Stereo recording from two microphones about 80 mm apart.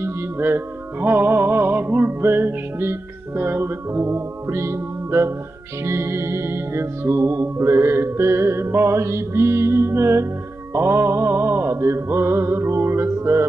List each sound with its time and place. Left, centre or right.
0.0 s music: right